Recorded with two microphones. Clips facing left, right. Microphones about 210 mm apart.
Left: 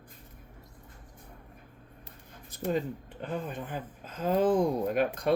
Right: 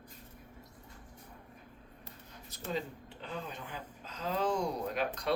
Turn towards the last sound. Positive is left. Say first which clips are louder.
# left 8 dB
turn(degrees=50)  # may be behind; listen again after turning